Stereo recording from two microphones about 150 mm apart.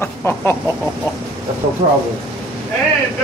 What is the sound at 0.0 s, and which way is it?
Speech, 15° left (ahead or behind).